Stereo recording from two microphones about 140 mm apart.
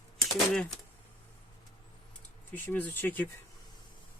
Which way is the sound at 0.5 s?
5° left (ahead or behind).